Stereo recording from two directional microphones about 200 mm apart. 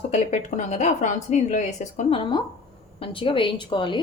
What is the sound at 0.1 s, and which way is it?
A woman's voice, 35° left (ahead or behind).